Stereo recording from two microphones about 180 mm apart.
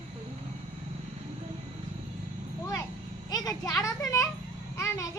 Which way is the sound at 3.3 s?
20° left (ahead or behind).